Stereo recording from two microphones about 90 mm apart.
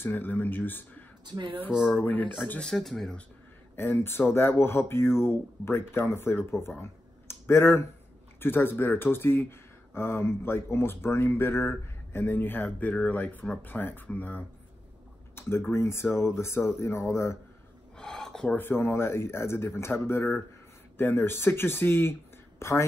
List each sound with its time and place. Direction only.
0.0 s speech: 20° left (ahead or behind)
1.2 s speech: 55° right (ahead or behind)
1.7 s speech: 5° right (ahead or behind)
2.0 s speech: 20° left (ahead or behind)
2.7 s speech: 5° left (ahead or behind)
3.7 s speech: 25° left (ahead or behind)
6.8 s a sound: 30° left (ahead or behind)
8.4 s speech: 25° left (ahead or behind)
17.9 s filing: 5° left (ahead or behind)
18.6 s a woman's voice: 25° left (ahead or behind)